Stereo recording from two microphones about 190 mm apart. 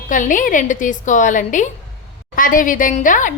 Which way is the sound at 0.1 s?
45° left (ahead or behind).